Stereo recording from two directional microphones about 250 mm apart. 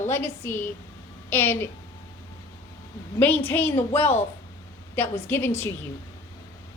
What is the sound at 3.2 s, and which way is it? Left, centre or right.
A woman's voice, centre.